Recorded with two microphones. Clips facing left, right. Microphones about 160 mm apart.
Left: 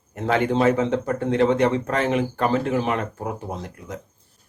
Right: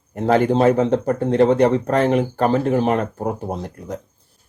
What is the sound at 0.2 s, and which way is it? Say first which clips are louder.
Speech: right 4 dB; 35° right (ahead or behind).